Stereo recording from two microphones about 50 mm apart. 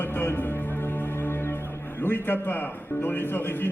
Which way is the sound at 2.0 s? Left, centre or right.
Left.